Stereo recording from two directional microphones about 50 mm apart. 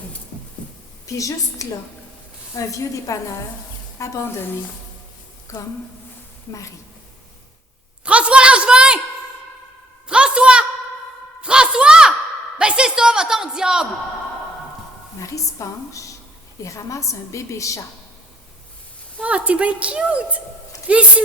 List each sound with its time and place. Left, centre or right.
1.0 s a woman's voice: left
5.5 s a woman's voice: left
8.0 s a sound: right
10.1 s a sound: centre
15.2 s a woman's voice: left
19.2 s a woman's voice: right